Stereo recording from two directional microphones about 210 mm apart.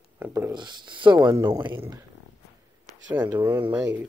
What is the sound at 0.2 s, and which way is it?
Speech, 15° right (ahead or behind).